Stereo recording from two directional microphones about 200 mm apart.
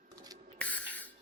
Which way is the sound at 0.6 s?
5° left (ahead or behind).